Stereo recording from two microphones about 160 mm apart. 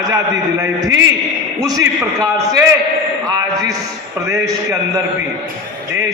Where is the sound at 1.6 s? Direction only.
20° right (ahead or behind).